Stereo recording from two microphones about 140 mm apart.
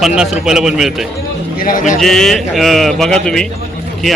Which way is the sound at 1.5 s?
80° left.